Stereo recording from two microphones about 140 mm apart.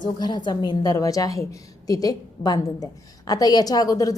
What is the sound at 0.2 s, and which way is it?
A woman's voice, 30° left (ahead or behind).